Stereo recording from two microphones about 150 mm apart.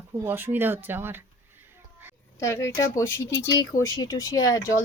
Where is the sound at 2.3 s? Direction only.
20° left (ahead or behind).